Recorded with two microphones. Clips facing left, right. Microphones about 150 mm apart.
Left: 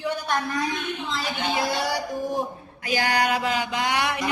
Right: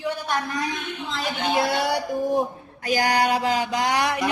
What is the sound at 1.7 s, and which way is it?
Music, 60° right (ahead or behind).